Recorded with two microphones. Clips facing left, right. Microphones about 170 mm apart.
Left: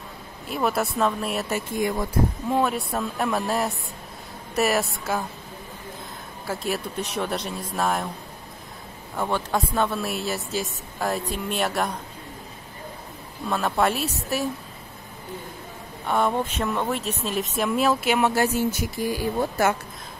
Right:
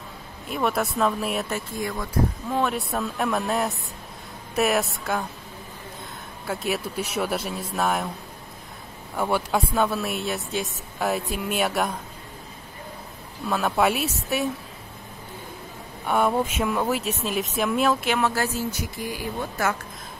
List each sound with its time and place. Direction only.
0.5 s a woman's voice: centre (ahead or behind)
1.8 s speech: 20° left (ahead or behind)
2.5 s a woman's voice: centre (ahead or behind)
6.4 s a woman's voice: centre (ahead or behind)
9.1 s a woman's voice: 5° right (ahead or behind)
13.5 s a woman's voice: centre (ahead or behind)
16.1 s a woman's voice: 5° right (ahead or behind); by 18.5 s 15° left (ahead or behind)
18.7 s speech: 30° left (ahead or behind)